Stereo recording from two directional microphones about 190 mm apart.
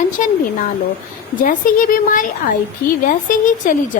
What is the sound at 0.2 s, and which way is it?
Speech, 45° left (ahead or behind).